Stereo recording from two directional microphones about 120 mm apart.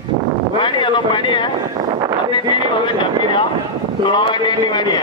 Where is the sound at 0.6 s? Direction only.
40° left (ahead or behind).